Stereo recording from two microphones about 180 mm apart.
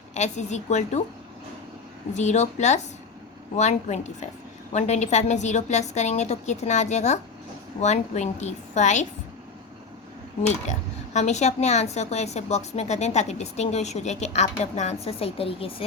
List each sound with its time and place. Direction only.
0.1 s speech: 40° left (ahead or behind)
2.1 s speech: 40° left (ahead or behind)
10.4 s speech: 40° left (ahead or behind)